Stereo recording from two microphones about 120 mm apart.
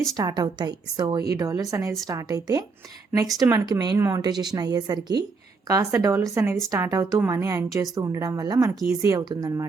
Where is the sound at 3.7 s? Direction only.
35° right (ahead or behind).